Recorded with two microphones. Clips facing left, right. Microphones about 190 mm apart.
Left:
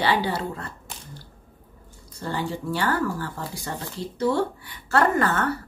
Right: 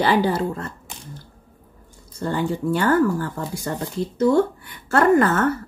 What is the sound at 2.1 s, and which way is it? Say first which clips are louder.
A woman's voice: right 5 dB; 50° right (ahead or behind).